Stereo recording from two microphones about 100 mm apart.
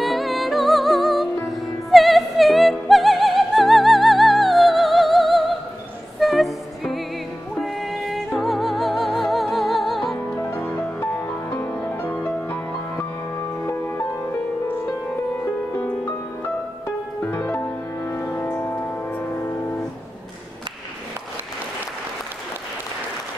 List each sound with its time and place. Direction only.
0.0 s music: centre (ahead or behind)
10.1 s music: 20° left (ahead or behind)
17.2 s music: 20° left (ahead or behind)